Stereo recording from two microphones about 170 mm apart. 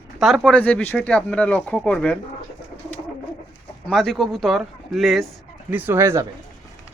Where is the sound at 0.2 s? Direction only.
Centre (ahead or behind).